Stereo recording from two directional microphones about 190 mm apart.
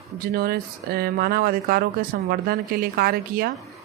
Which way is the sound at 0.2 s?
50° right (ahead or behind).